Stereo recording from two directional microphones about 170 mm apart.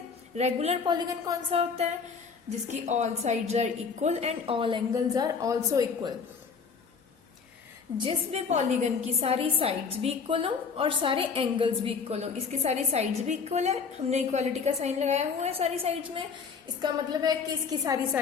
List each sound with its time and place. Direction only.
0.3 s a woman's voice: 40° right (ahead or behind)
0.9 s a woman's voice: 20° right (ahead or behind)
1.5 s a woman's voice: 35° right (ahead or behind); by 6.1 s 20° right (ahead or behind)
7.9 s a woman's voice: 35° right (ahead or behind)
16.8 s a woman's voice: 25° right (ahead or behind)